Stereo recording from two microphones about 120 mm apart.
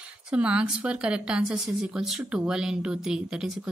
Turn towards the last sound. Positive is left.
turn(degrees=-5)  # may be behind; listen again after turning